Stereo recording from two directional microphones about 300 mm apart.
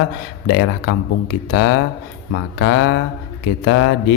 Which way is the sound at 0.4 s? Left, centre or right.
Left.